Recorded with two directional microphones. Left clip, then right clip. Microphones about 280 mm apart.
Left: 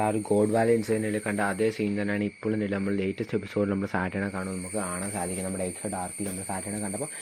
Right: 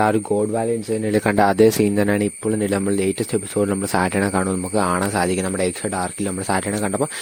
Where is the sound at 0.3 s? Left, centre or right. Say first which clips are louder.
Right 2 dB; centre.